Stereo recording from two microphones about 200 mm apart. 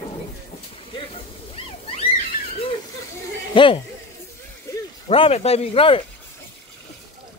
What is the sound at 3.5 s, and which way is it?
Speech, 25° left (ahead or behind).